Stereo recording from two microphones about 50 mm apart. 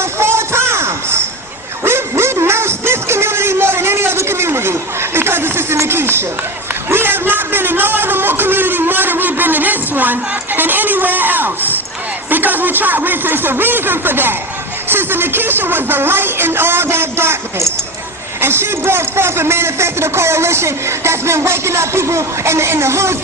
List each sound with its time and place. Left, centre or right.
0.0 s music: right
1.8 s a sound: right
12.3 s a man's voice: right